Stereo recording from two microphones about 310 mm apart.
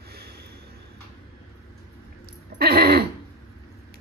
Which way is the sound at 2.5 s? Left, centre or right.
Right.